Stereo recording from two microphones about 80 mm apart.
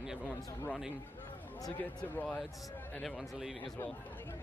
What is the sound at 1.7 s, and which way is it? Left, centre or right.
Speech, left.